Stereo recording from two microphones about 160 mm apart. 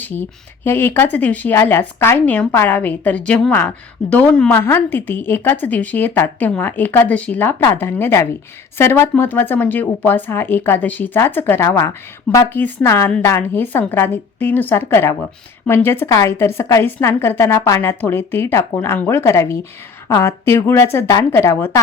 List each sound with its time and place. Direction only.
0.0 s speech: 10° left (ahead or behind)